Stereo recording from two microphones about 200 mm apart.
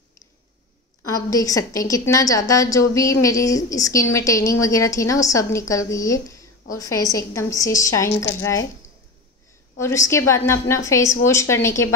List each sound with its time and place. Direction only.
1.0 s a woman's voice: 15° left (ahead or behind)
9.8 s a woman's voice: 15° left (ahead or behind)